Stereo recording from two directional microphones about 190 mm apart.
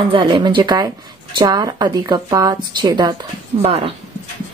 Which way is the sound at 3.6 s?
35° right (ahead or behind).